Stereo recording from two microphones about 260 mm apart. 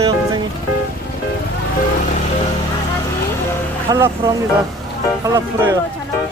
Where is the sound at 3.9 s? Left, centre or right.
Centre.